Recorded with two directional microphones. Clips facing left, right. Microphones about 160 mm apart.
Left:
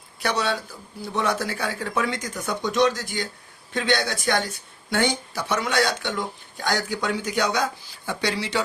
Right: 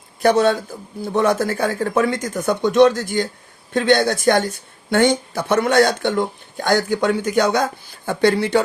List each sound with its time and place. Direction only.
0.2 s speech: 50° right (ahead or behind)